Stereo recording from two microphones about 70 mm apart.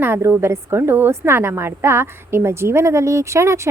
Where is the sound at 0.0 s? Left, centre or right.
Right.